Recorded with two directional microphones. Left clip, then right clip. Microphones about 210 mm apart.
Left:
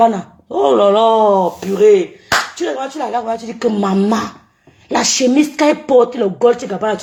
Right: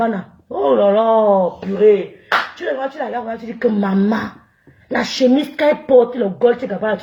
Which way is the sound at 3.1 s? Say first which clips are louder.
Left 5 dB; 25° left (ahead or behind).